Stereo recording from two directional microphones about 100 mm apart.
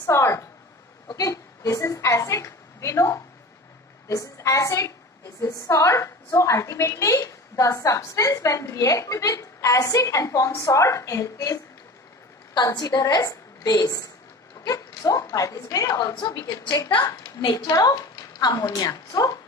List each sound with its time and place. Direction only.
0.0 s a sound: 30° left (ahead or behind)
1.0 s a woman's voice: 35° left (ahead or behind)
12.5 s a woman's voice: 45° left (ahead or behind)